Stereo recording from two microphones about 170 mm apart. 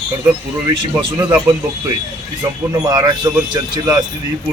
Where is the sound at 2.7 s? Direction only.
20° right (ahead or behind).